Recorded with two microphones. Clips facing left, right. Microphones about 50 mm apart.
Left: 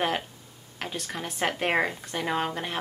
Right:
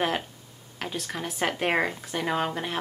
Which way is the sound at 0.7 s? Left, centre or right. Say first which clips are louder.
Right 1 dB; centre.